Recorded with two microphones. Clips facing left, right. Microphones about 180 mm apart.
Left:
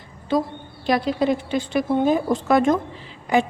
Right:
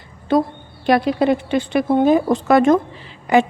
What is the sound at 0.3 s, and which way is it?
A woman's voice, 60° right (ahead or behind).